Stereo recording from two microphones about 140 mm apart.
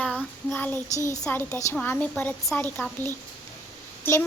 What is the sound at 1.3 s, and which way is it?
A woman's voice, 20° left (ahead or behind).